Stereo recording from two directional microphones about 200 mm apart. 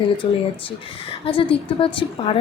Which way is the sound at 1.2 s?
25° left (ahead or behind).